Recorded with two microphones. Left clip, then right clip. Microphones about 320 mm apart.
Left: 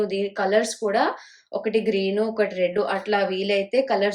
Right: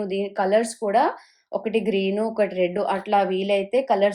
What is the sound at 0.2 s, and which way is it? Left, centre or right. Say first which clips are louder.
Speech: right 3 dB; centre.